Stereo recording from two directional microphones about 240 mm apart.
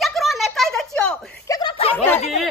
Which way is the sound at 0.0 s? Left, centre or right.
Centre.